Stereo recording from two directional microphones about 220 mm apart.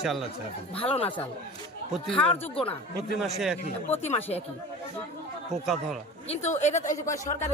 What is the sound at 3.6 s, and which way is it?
Speech, 30° left (ahead or behind).